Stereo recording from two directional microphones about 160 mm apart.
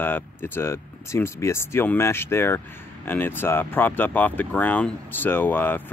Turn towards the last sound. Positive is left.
turn(degrees=10)  # may be behind; listen again after turning